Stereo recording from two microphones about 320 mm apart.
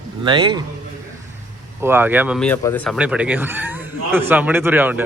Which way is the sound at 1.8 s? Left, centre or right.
Centre.